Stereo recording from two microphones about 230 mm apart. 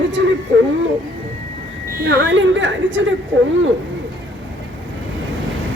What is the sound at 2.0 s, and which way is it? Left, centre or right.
A woman's voice, right.